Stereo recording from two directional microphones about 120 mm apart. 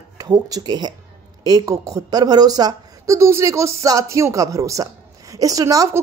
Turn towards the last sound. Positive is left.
turn(degrees=-25)  # may be behind; listen again after turning